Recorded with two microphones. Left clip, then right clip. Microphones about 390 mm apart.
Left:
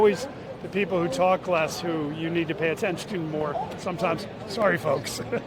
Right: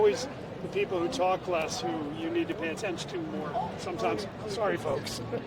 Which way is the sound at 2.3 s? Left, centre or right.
Left.